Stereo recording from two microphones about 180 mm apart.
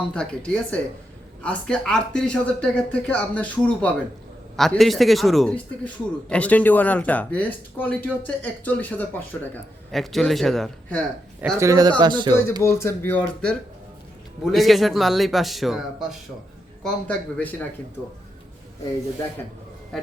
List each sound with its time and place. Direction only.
0.1 s speech: 5° left (ahead or behind)
11.6 s speech: 20° right (ahead or behind)
12.6 s speech: 15° left (ahead or behind)
19.9 s speech: centre (ahead or behind)